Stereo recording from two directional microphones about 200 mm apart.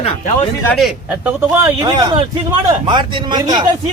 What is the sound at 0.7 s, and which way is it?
Speech, centre (ahead or behind).